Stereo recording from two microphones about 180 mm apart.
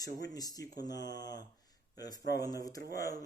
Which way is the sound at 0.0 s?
20° left (ahead or behind).